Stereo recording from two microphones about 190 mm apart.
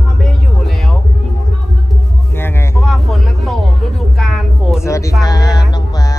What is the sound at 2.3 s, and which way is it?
Music, 10° left (ahead or behind).